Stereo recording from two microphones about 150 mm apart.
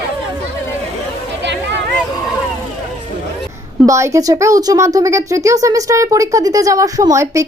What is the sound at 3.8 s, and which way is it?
Speech, 20° right (ahead or behind).